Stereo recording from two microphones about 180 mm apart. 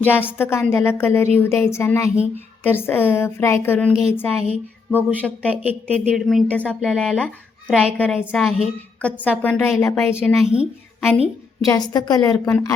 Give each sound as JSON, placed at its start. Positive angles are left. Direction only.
{"t": 0.0, "sound": "a woman's voice", "side_deg": 10}
{"t": 4.3, "sound": "a woman's voice", "side_deg": -5}
{"t": 10.4, "sound": "speech", "side_deg": -5}
{"t": 11.6, "sound": "a woman's voice", "side_deg": 20}